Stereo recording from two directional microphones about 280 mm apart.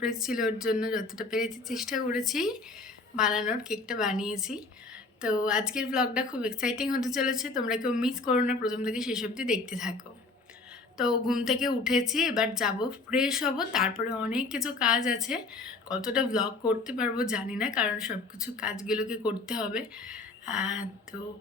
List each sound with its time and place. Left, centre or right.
0.0 s speech: centre
10.9 s speech: centre